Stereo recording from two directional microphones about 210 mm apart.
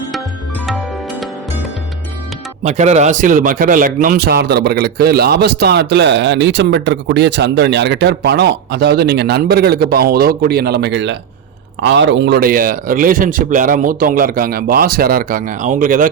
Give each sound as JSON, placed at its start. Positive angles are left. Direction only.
{"t": 0.6, "sound": "music", "side_deg": 0}
{"t": 2.6, "sound": "a man's voice", "side_deg": -35}